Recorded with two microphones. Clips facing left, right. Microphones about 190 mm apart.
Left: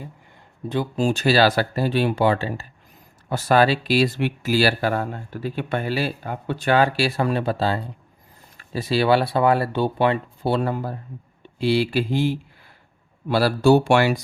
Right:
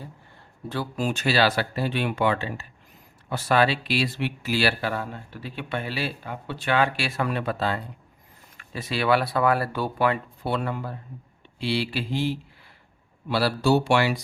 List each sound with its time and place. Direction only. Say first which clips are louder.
0.7 s speech: left 6 dB; 25° left (ahead or behind); by 14.2 s 50° left (ahead or behind)